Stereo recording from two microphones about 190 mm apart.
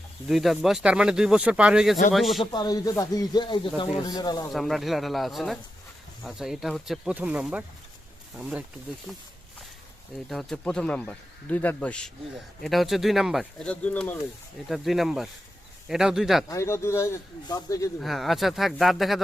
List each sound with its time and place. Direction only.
0.3 s speech: centre (ahead or behind)
2.4 s speech: 20° left (ahead or behind)
4.5 s speech: centre (ahead or behind)
10.2 s speech: 5° left (ahead or behind)
16.5 s speech: 15° left (ahead or behind)
18.0 s speech: centre (ahead or behind)